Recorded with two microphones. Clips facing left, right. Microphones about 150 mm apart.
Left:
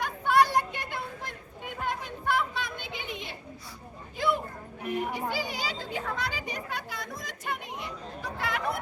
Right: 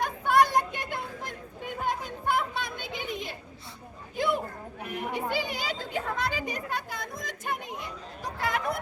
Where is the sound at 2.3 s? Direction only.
45° right (ahead or behind).